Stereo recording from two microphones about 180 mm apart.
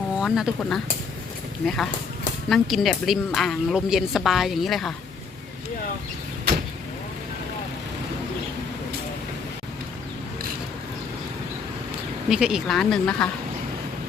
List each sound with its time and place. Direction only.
0.2 s a woman's voice: centre (ahead or behind)
12.3 s a woman's voice: 5° right (ahead or behind)